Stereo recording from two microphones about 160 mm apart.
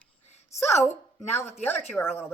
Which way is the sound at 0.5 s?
20° left (ahead or behind).